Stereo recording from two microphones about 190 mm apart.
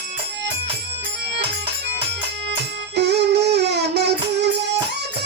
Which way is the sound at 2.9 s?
60° right (ahead or behind).